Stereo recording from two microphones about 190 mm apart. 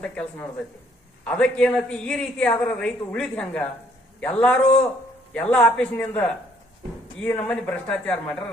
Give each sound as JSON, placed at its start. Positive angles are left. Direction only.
{"t": 0.0, "sound": "a man's voice", "side_deg": 5}